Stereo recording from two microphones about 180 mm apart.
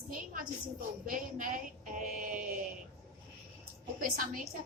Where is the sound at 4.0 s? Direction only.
50° right (ahead or behind).